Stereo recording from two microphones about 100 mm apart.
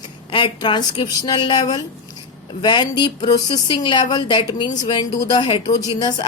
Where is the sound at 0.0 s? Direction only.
55° left (ahead or behind).